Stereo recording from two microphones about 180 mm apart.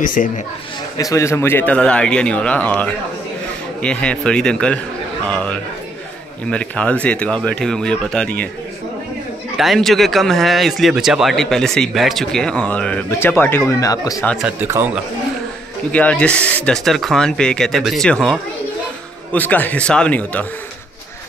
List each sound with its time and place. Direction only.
0.0 s speech: 45° left (ahead or behind)
0.9 s speech: 15° left (ahead or behind)
9.6 s speech: centre (ahead or behind); by 14.2 s 20° left (ahead or behind)
14.4 s speech: 10° right (ahead or behind)
15.9 s speech: 5° left (ahead or behind)